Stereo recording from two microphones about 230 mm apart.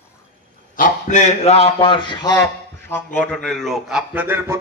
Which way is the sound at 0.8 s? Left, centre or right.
Left.